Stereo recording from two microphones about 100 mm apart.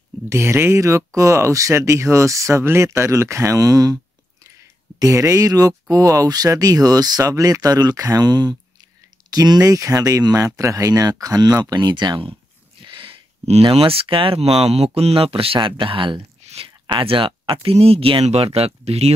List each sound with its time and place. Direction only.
0.3 s speech: 25° right (ahead or behind); by 19.1 s 90° right